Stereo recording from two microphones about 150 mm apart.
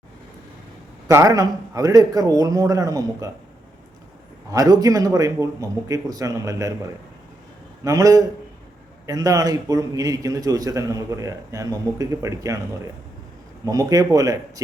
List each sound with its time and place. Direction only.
1.0 s a man's voice: 20° right (ahead or behind)
4.5 s a man's voice: 25° right (ahead or behind)
7.9 s a man's voice: 20° right (ahead or behind)
13.7 s a man's voice: 25° right (ahead or behind)